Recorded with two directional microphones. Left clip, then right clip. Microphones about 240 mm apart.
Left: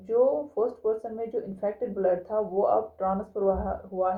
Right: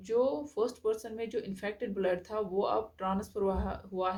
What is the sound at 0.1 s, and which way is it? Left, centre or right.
Speech, right.